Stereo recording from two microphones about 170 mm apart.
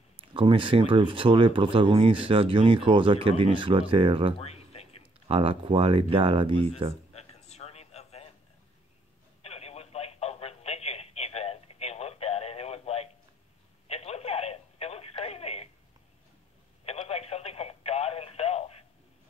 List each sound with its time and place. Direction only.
0.3 s speech: 30° right (ahead or behind)
4.4 s a sound: 40° left (ahead or behind)
5.3 s speech: 30° right (ahead or behind)
7.2 s a sound: 40° left (ahead or behind)
9.4 s telephone: 35° left (ahead or behind)
16.8 s telephone: 35° left (ahead or behind)